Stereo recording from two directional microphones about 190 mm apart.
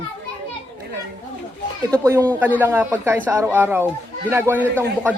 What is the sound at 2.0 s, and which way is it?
Speech, 15° right (ahead or behind).